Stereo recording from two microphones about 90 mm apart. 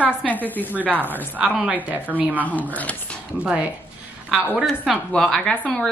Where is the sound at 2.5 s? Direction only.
20° left (ahead or behind).